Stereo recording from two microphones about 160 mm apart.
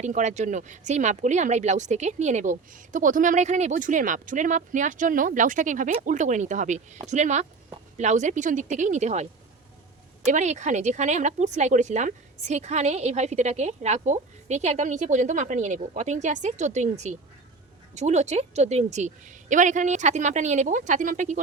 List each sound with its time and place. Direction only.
0.0 s speech: 45° right (ahead or behind)
10.2 s speech: 50° right (ahead or behind)